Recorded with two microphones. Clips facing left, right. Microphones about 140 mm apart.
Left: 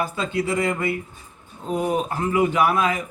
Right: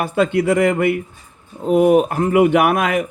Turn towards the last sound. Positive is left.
turn(degrees=-70)  # may be behind; listen again after turning